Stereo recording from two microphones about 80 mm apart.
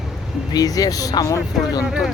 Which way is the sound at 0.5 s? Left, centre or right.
Left.